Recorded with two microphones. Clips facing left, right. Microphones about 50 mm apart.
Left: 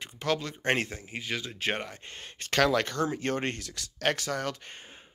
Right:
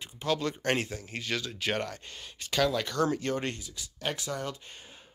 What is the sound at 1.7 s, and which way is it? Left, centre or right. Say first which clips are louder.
Speech: right 3 dB; left.